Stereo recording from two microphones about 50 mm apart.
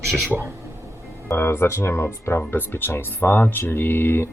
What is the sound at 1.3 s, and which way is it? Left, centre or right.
Speech, left.